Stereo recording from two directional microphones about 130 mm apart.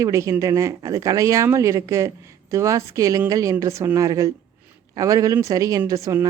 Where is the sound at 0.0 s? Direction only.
25° right (ahead or behind).